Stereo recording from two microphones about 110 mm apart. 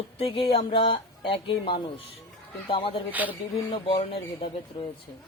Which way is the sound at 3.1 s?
15° right (ahead or behind).